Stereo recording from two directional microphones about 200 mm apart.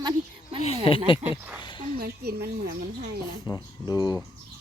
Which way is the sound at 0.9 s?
25° left (ahead or behind).